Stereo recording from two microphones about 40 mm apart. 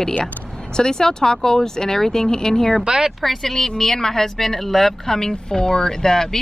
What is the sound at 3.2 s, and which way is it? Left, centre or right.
Speech, centre.